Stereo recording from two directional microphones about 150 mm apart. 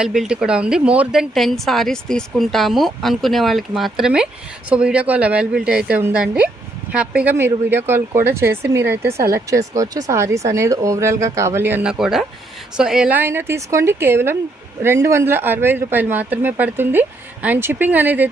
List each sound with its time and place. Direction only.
0.0 s a woman's voice: 5° right (ahead or behind)